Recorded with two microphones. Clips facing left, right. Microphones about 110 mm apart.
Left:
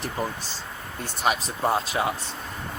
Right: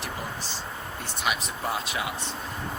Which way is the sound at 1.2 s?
40° left (ahead or behind).